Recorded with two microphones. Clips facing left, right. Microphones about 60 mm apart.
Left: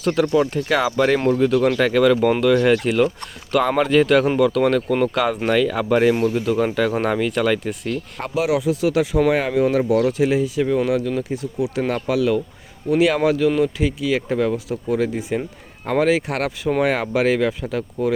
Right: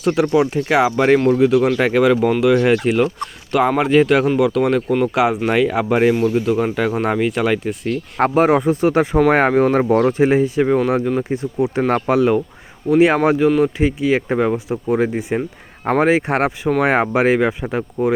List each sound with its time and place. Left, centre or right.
0.0 s speech: centre
8.2 s speech: right